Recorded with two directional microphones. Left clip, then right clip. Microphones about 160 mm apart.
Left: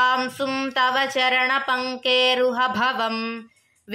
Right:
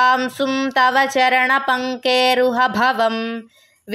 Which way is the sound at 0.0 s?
35° right (ahead or behind).